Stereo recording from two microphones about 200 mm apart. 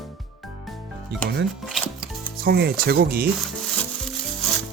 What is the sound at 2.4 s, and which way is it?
Speech, 50° right (ahead or behind).